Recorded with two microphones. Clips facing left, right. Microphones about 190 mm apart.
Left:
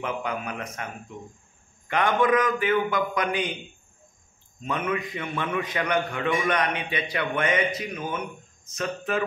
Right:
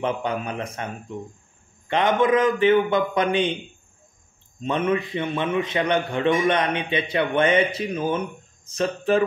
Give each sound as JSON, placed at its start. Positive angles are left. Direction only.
{"t": 0.0, "sound": "a man's voice", "side_deg": -30}
{"t": 1.9, "sound": "a man's voice", "side_deg": -25}
{"t": 4.6, "sound": "a man's voice", "side_deg": -30}